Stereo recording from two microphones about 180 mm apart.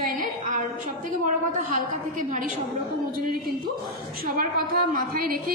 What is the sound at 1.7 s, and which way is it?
Speech, 50° right (ahead or behind).